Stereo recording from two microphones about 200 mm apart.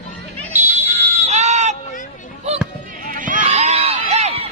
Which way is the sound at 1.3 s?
35° right (ahead or behind).